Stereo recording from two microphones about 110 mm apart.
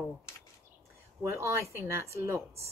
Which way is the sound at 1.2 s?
25° right (ahead or behind).